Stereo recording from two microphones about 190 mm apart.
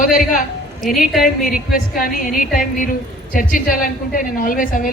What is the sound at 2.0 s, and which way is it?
A woman's voice, 45° left (ahead or behind).